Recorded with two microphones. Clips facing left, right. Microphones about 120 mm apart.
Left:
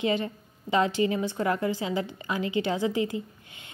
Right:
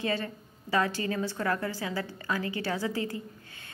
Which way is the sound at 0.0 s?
20° left (ahead or behind).